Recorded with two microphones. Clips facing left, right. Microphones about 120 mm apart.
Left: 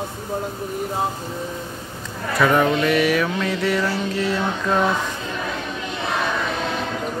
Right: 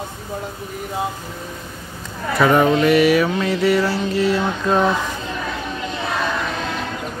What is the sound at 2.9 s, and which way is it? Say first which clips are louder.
Mantra: right 4 dB; 5° right (ahead or behind).